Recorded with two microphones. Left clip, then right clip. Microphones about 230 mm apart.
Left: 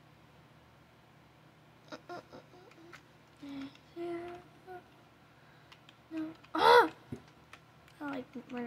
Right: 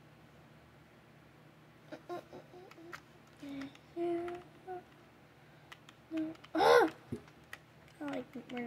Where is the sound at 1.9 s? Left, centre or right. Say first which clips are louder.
Right 1 dB; left.